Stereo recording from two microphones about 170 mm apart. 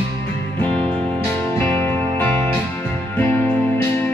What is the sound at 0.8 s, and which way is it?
Music, 30° right (ahead or behind).